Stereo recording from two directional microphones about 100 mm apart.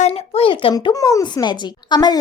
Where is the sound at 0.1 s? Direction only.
75° left (ahead or behind).